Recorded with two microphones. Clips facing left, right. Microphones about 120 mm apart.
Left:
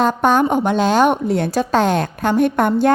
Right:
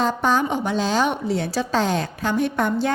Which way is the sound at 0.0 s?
55° left (ahead or behind).